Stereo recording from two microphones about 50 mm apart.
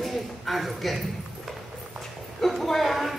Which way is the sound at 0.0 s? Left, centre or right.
Centre.